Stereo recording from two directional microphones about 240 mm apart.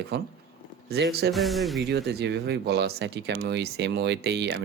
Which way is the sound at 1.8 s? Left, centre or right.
Right.